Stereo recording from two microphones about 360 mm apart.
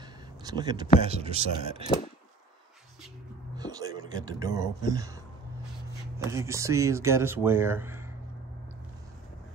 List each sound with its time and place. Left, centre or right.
0.4 s speech: centre
3.5 s speech: centre